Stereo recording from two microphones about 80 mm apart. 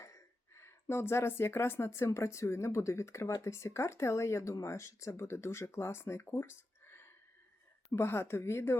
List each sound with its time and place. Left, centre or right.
0.0 s speech: left